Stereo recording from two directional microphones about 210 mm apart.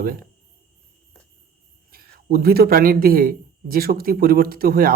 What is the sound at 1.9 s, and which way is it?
A man's voice, 45° right (ahead or behind).